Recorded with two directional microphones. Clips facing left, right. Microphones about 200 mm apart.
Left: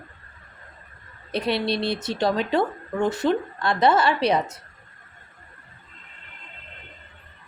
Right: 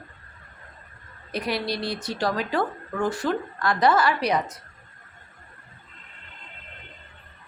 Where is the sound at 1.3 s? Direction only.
25° left (ahead or behind).